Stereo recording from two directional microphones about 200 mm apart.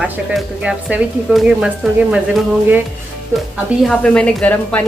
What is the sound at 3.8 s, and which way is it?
A woman's voice, 5° left (ahead or behind).